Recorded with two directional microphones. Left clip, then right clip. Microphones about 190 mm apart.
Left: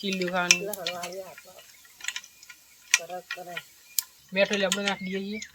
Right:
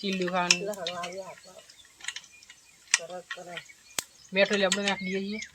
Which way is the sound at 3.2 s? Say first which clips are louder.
Left 3 dB; 35° left (ahead or behind).